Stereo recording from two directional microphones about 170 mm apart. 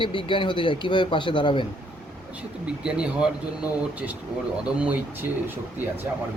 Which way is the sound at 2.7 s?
5° right (ahead or behind).